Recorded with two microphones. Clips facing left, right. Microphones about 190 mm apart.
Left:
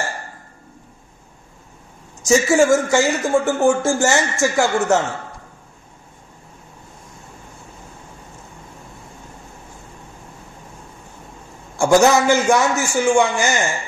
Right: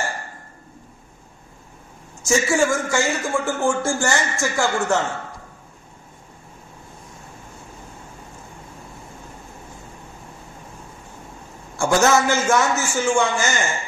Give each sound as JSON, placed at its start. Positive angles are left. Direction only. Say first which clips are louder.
{"t": 2.2, "sound": "speech", "louder": "left 5 dB", "side_deg": 20}
{"t": 11.8, "sound": "a man's voice", "louder": "left 4 dB", "side_deg": 15}